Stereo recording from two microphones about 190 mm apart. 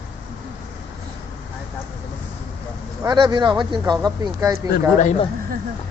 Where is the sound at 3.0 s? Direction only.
20° right (ahead or behind).